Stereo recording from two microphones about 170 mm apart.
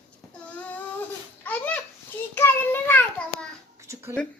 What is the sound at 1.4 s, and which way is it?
Babbling, 10° left (ahead or behind).